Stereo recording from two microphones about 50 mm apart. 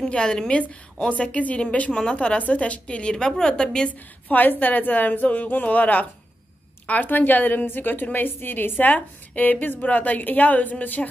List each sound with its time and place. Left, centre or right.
0.1 s a woman's voice: centre
4.3 s a woman's voice: left